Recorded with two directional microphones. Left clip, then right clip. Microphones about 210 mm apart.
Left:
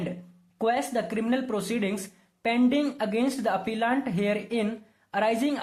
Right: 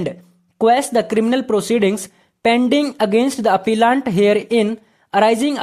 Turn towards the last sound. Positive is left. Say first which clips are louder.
# right 11 dB
turn(degrees=-40)  # may be behind; listen again after turning